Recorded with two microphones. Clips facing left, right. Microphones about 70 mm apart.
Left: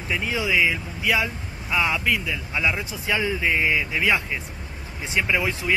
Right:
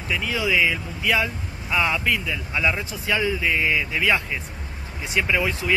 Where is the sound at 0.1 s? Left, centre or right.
Left; by 3.0 s centre.